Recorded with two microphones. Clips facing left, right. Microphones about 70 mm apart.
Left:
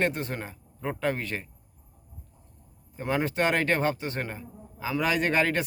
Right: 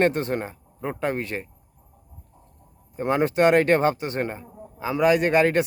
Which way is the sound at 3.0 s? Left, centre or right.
Right.